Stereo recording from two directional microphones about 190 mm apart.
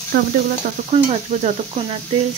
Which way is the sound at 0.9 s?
35° right (ahead or behind).